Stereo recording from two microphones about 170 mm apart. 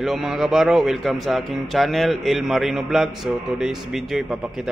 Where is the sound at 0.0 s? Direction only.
Centre (ahead or behind).